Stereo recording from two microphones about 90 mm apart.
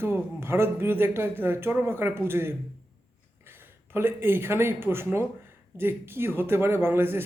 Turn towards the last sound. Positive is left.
turn(degrees=-25)  # may be behind; listen again after turning